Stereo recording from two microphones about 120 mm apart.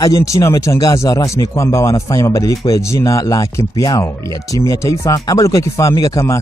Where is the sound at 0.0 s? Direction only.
25° left (ahead or behind).